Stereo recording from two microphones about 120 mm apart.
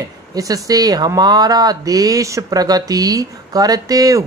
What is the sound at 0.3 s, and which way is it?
Speech, 30° right (ahead or behind).